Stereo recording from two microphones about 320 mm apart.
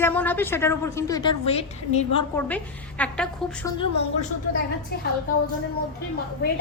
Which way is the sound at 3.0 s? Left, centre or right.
Centre.